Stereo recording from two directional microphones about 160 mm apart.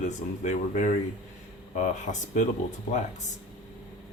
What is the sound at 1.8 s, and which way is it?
Speech, 50° left (ahead or behind).